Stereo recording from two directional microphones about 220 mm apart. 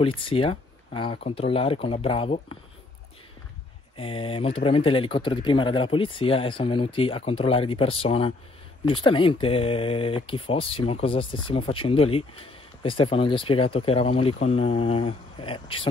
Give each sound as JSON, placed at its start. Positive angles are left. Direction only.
{"t": 0.2, "sound": "speech", "side_deg": 25}
{"t": 3.9, "sound": "speech", "side_deg": 25}